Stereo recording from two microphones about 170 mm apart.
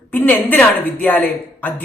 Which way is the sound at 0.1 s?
10° left (ahead or behind).